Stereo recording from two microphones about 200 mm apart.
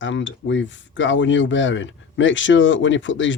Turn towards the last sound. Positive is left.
turn(degrees=70)  # may be behind; listen again after turning